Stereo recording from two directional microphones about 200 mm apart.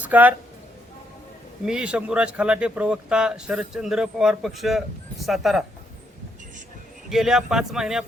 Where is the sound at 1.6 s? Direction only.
5° right (ahead or behind).